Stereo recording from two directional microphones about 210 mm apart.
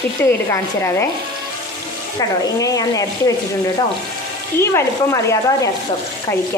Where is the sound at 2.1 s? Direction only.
15° left (ahead or behind).